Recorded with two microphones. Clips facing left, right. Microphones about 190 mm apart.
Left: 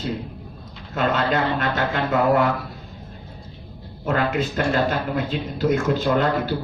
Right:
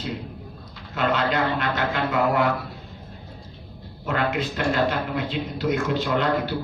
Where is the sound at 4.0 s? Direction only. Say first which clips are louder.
Left 3 dB; 45° left (ahead or behind).